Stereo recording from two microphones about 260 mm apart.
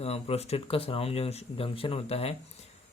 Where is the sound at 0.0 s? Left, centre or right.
Left.